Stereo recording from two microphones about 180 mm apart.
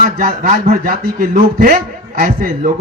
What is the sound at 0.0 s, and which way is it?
Speech, 50° right (ahead or behind).